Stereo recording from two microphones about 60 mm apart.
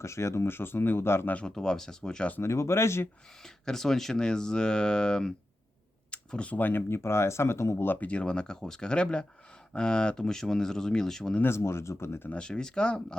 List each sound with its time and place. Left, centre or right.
0.0 s speech: left
1.5 s speech: centre
2.4 s speech: left
3.4 s speech: centre; by 6.8 s left
6.8 s speech: left
7.9 s speech: left; by 11.3 s centre
11.4 s speech: left
12.3 s speech: centre